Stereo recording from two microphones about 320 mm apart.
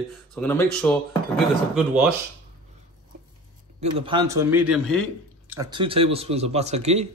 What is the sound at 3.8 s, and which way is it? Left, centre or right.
Speech, centre.